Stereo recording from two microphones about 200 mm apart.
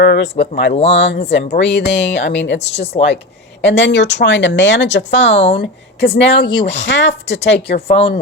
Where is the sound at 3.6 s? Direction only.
60° left (ahead or behind).